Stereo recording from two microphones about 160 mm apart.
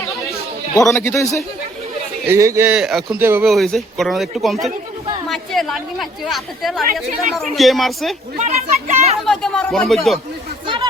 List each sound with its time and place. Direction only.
0.8 s a man's voice: 15° left (ahead or behind)
2.2 s a man's voice: 20° right (ahead or behind)
2.7 s a woman's voice: 5° right (ahead or behind)
3.2 s a man's voice: 15° right (ahead or behind)
3.4 s a woman's voice: centre (ahead or behind)
8.4 s speech: 45° right (ahead or behind)
9.2 s a woman's voice: 5° left (ahead or behind)